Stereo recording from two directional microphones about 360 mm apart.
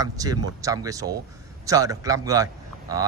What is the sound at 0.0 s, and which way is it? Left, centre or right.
A man's voice, centre.